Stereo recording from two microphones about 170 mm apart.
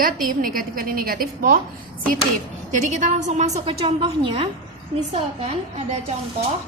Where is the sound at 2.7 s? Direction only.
45° right (ahead or behind).